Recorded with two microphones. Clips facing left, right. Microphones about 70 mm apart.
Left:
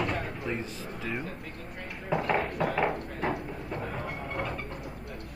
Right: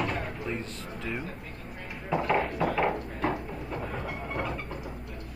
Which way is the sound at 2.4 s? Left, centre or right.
Left.